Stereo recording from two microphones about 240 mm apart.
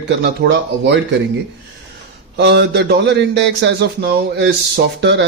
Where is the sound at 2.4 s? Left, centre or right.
Right.